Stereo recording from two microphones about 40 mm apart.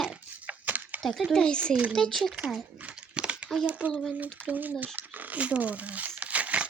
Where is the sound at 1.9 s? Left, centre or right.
Centre.